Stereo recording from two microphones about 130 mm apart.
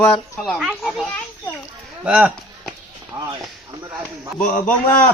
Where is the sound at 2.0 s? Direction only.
10° right (ahead or behind).